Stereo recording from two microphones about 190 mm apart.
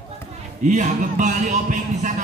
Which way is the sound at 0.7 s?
40° right (ahead or behind).